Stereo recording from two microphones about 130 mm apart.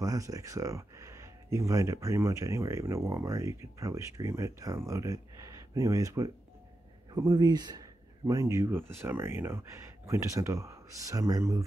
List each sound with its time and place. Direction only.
0.0 s speech: 25° right (ahead or behind)